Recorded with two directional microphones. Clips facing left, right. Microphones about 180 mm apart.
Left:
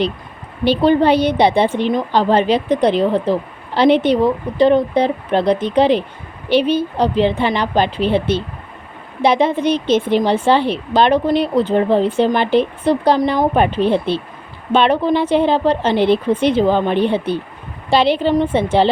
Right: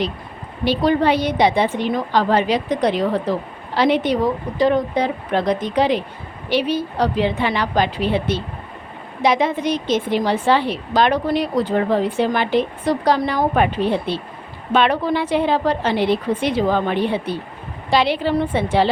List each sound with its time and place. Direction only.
0.6 s a woman's voice: 30° left (ahead or behind)